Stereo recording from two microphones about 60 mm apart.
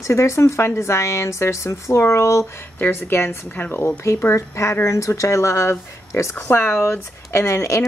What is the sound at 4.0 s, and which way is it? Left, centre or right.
A woman's voice, left.